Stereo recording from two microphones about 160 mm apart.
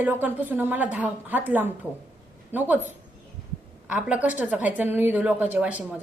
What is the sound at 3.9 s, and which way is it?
A woman's voice, 10° right (ahead or behind).